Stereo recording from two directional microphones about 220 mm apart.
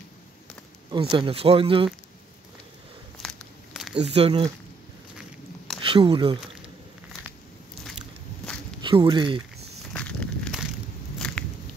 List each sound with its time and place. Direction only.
1.1 s speech: 25° right (ahead or behind)
3.2 s a sound: 5° left (ahead or behind)
4.0 s speech: 25° right (ahead or behind)
5.8 s speech: 25° right (ahead or behind)
8.8 s speech: 20° right (ahead or behind)
9.9 s walk: 5° left (ahead or behind)
11.1 s a sound: 5° left (ahead or behind)